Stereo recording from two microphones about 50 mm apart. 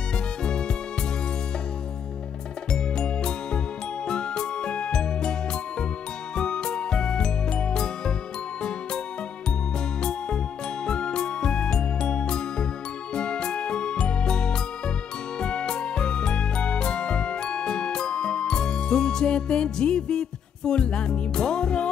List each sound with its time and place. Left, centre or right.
0.4 s music: centre
2.7 s music: centre
10.9 s music: centre